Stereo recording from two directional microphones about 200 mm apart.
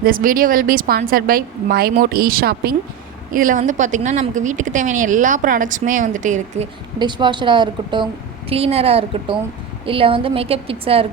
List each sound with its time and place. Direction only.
0.0 s a woman's voice: 45° right (ahead or behind)
7.0 s a woman's voice: 25° right (ahead or behind)